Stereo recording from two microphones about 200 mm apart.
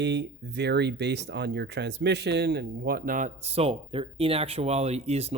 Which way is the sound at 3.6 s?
25° right (ahead or behind).